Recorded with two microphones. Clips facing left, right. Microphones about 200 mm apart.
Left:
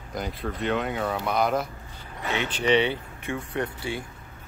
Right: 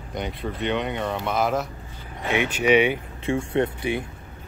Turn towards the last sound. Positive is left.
turn(degrees=-20)  # may be behind; listen again after turning